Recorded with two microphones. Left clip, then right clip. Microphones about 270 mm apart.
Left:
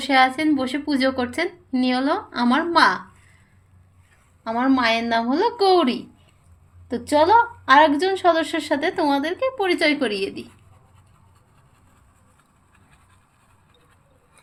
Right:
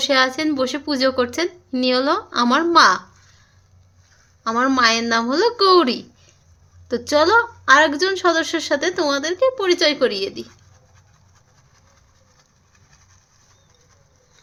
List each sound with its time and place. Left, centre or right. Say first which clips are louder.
0.0 s a woman's voice: even; centre
4.4 s a woman's voice: right 3 dB; centre